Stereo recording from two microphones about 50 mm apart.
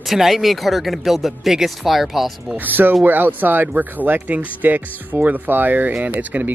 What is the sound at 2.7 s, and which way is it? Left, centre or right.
Speech, right.